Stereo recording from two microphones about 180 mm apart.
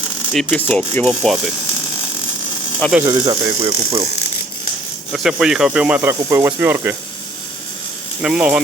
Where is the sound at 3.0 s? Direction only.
20° right (ahead or behind).